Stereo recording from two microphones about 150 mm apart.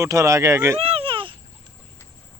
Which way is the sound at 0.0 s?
20° right (ahead or behind).